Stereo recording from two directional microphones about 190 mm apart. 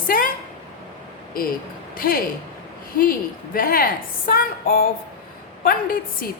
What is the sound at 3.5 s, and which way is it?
A woman's voice, 50° left (ahead or behind).